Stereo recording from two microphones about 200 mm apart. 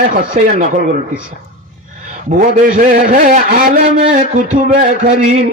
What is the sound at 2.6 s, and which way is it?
A man's voice, 45° right (ahead or behind).